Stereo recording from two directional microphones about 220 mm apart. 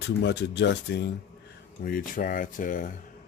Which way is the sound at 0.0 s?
50° left (ahead or behind).